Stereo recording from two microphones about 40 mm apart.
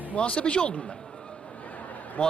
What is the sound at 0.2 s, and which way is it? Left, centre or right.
Speech, left.